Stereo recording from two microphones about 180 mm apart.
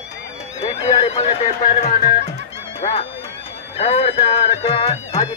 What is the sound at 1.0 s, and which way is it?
Speech, 35° left (ahead or behind).